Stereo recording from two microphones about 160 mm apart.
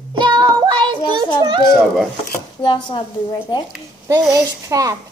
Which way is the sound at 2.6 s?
30° left (ahead or behind).